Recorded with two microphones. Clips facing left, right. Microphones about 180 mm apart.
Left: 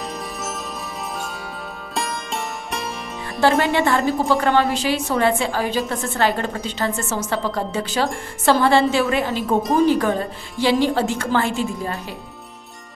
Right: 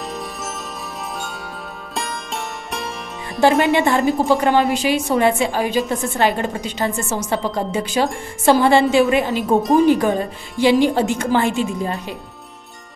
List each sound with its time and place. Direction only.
2.0 s music: centre (ahead or behind)
3.3 s a woman's voice: 20° right (ahead or behind)
9.6 s speech: centre (ahead or behind)
9.8 s a woman's voice: 15° right (ahead or behind)